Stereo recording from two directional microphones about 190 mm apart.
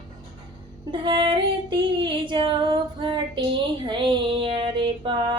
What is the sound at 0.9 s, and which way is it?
Female singing, 25° right (ahead or behind).